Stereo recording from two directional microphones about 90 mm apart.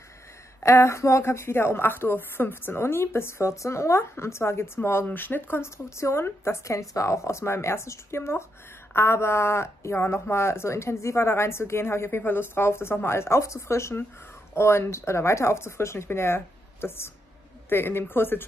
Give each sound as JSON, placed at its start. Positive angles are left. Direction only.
{"t": 0.6, "sound": "speech", "side_deg": 30}